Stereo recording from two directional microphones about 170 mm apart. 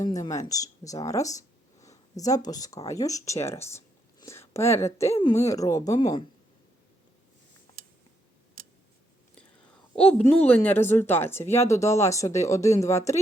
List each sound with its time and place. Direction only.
0.0 s speech: 20° left (ahead or behind)
9.9 s a woman's voice: 5° left (ahead or behind)